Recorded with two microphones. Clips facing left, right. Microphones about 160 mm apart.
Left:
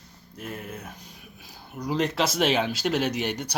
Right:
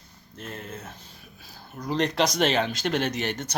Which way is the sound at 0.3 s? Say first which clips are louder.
Left 1 dB; 10° left (ahead or behind).